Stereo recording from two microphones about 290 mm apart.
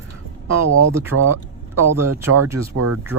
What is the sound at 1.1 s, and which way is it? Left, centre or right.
Speech, right.